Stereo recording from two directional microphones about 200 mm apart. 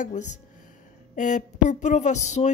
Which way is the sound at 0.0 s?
35° left (ahead or behind).